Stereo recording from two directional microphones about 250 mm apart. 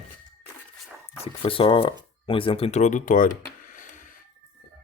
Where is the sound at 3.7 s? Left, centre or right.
Left.